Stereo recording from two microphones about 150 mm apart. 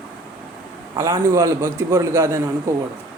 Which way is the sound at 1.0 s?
25° right (ahead or behind).